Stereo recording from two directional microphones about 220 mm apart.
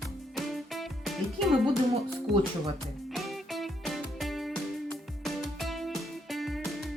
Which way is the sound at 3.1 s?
Centre (ahead or behind).